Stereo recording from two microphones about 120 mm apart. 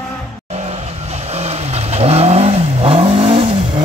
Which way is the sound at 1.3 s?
60° right (ahead or behind).